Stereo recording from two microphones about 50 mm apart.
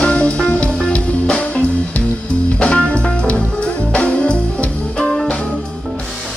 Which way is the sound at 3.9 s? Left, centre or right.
Left.